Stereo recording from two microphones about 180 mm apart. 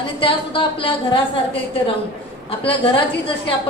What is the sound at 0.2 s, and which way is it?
A woman's voice, 30° left (ahead or behind).